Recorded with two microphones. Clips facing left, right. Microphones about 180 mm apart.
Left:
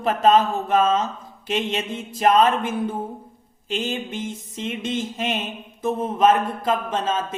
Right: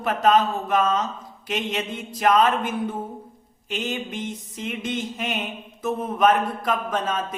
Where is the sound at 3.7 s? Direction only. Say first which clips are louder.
Left 2 dB; 30° left (ahead or behind).